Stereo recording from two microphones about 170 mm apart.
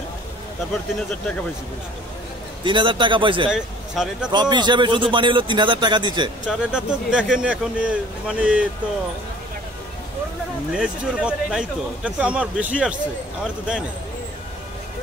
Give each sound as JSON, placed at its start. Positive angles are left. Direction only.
{"t": 0.9, "sound": "speech", "side_deg": 5}
{"t": 2.6, "sound": "speech", "side_deg": -30}
{"t": 3.4, "sound": "speech", "side_deg": -5}
{"t": 4.3, "sound": "speech", "side_deg": -25}
{"t": 6.6, "sound": "speech", "side_deg": -5}
{"t": 10.7, "sound": "speech", "side_deg": -5}